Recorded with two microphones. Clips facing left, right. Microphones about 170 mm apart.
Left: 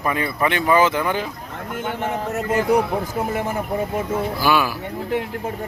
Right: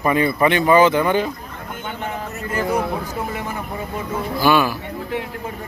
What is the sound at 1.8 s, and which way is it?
Speech, 90° left.